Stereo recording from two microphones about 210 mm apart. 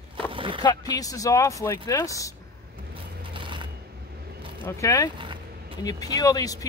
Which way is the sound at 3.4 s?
25° right (ahead or behind).